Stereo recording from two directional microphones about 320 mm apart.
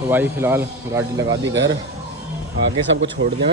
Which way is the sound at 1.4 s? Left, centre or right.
Right.